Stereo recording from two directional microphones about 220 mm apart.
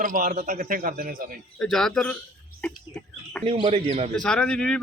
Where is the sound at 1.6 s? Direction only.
Centre (ahead or behind).